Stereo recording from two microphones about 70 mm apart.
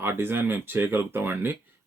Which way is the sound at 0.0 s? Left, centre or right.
Right.